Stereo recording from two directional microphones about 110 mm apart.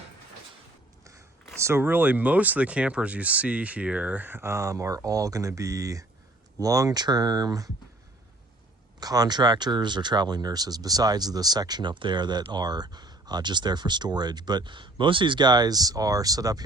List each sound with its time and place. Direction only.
1.6 s speech: 20° right (ahead or behind); by 7.7 s 35° right (ahead or behind)
9.0 s speech: 35° right (ahead or behind)